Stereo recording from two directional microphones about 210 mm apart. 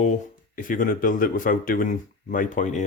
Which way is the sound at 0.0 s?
40° left (ahead or behind).